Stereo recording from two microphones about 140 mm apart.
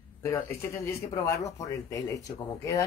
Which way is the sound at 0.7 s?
20° left (ahead or behind).